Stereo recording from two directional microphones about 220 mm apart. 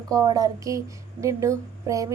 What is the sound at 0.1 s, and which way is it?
A woman's voice, 15° right (ahead or behind).